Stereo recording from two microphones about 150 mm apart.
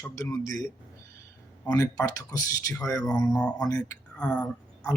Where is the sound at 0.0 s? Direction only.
20° left (ahead or behind).